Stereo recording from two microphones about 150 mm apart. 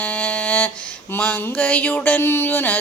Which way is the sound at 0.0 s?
10° left (ahead or behind).